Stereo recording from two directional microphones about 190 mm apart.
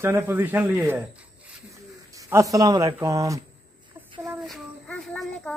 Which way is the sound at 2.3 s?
15° right (ahead or behind).